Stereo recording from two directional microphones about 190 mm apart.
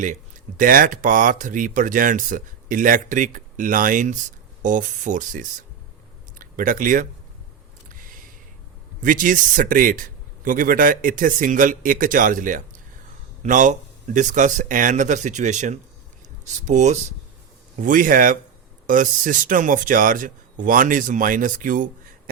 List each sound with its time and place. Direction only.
0.0 s speech: 45° right (ahead or behind)
7.9 s a sound: 45° right (ahead or behind)
9.0 s speech: 45° right (ahead or behind)